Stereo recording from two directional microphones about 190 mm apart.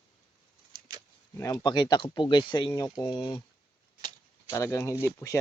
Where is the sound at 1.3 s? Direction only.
20° left (ahead or behind).